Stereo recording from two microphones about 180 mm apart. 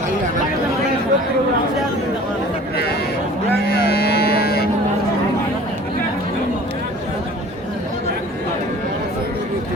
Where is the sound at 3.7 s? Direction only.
60° left (ahead or behind).